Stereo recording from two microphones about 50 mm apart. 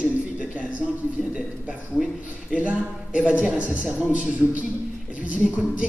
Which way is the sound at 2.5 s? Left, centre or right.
Right.